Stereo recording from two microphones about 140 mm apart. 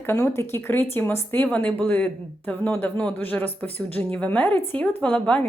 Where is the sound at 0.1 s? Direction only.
20° left (ahead or behind).